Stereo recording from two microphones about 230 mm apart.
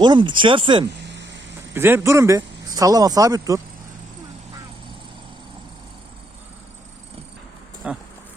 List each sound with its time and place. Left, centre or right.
0.0 s speech: centre
1.0 s vehicle: right
1.7 s speech: centre
7.8 s speech: centre